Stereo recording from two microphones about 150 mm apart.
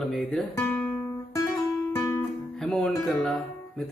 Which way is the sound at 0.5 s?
15° left (ahead or behind).